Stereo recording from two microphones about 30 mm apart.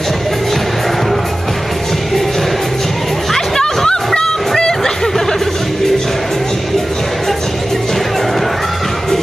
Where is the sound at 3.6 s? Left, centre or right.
Left.